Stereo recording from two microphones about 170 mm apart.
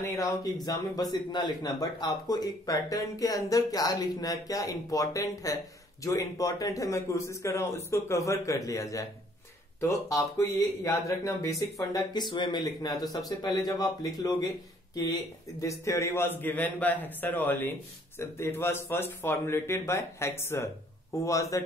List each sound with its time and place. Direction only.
0.0 s a man's voice: 20° left (ahead or behind)
14.1 s speech: 20° left (ahead or behind)
15.6 s a man's voice: 15° left (ahead or behind)